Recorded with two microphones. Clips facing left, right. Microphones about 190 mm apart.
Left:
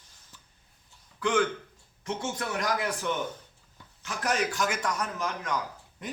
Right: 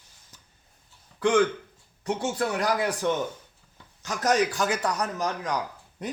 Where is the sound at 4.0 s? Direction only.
40° right (ahead or behind).